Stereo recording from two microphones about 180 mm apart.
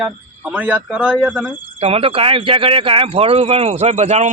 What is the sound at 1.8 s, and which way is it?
Speech, 35° right (ahead or behind).